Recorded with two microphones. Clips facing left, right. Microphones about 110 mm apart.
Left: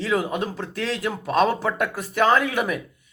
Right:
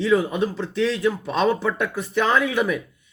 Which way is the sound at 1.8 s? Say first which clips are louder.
Left 1 dB; 50° left (ahead or behind).